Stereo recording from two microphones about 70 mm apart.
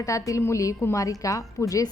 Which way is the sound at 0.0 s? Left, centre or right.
Left.